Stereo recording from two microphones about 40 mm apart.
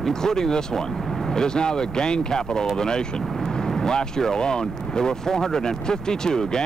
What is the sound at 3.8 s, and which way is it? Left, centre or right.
Speech, centre.